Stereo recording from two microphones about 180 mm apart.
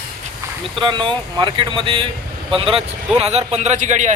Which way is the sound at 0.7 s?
25° right (ahead or behind).